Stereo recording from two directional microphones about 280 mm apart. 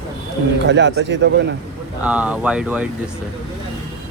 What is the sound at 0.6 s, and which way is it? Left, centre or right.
Speech, right.